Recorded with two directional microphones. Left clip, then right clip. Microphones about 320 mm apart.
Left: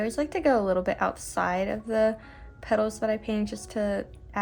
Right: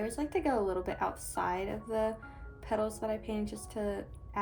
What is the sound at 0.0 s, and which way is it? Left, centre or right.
Speech, left.